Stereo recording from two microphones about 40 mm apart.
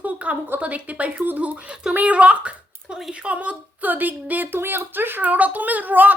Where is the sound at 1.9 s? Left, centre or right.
Right.